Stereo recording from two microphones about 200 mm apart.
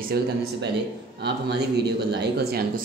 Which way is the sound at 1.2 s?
55° right (ahead or behind).